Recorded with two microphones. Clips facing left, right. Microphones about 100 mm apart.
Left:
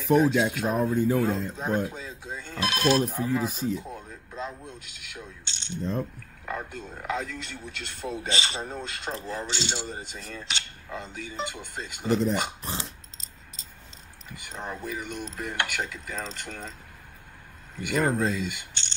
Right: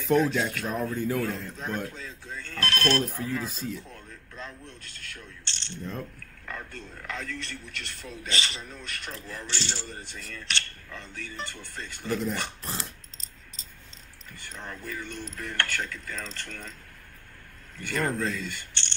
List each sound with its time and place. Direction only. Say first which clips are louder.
0.1 s a man's voice: left 3 dB; 15° left (ahead or behind)
4.1 s a sound: left 5 dB; 25° left (ahead or behind)
4.6 s speech: left 2 dB; 15° left (ahead or behind)
6.9 s coin: left 6 dB; 20° left (ahead or behind)
8.8 s coin: left 5 dB; 20° left (ahead or behind)
14.5 s coin: left 5 dB; 25° left (ahead or behind)
14.9 s a man's voice: left 3 dB; 15° left (ahead or behind)
16.3 s coin: left 3 dB; 20° left (ahead or behind)
17.7 s a man's voice: left 4 dB; 15° left (ahead or behind)
18.1 s coin: left 4 dB; 20° left (ahead or behind)